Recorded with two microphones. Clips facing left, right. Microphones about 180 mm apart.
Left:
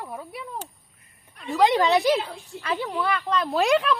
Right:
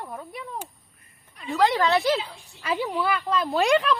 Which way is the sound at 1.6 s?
20° left (ahead or behind).